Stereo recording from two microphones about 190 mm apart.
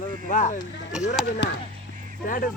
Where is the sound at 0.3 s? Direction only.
45° left (ahead or behind).